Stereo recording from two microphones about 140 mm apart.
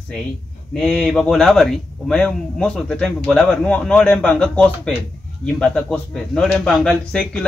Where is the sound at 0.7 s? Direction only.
5° left (ahead or behind).